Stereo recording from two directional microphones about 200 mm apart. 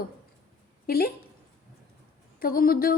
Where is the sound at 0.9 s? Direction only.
50° left (ahead or behind).